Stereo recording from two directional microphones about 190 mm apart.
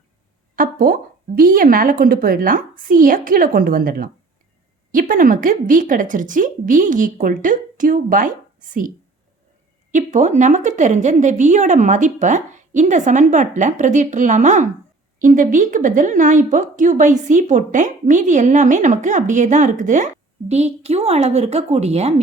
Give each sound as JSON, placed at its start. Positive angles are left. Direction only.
{"t": 0.5, "sound": "a sound", "side_deg": -50}
{"t": 1.4, "sound": "a woman's voice", "side_deg": -45}
{"t": 9.9, "sound": "a woman's voice", "side_deg": -40}